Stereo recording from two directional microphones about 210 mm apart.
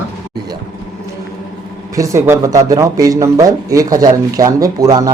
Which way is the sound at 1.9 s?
15° right (ahead or behind).